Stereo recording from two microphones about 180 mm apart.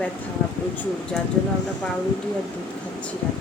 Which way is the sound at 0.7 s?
10° left (ahead or behind).